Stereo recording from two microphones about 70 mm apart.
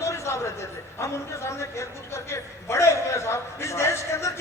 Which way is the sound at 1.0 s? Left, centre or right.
Left.